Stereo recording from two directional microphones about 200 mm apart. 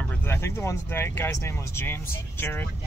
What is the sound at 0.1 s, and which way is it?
Speech, 10° left (ahead or behind).